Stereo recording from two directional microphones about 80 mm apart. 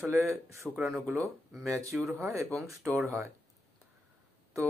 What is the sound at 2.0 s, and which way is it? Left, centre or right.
Speech, centre.